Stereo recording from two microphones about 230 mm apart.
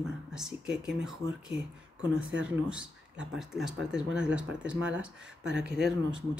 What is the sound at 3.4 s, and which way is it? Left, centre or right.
Speech, centre.